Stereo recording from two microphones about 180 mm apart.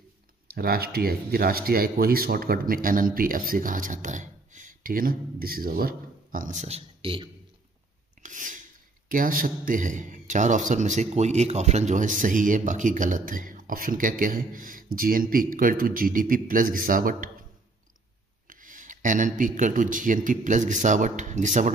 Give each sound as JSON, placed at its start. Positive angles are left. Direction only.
{"t": 0.6, "sound": "a man's voice", "side_deg": -55}
{"t": 8.2, "sound": "a sound", "side_deg": -45}
{"t": 9.1, "sound": "a man's voice", "side_deg": -50}
{"t": 18.5, "sound": "a man's voice", "side_deg": -45}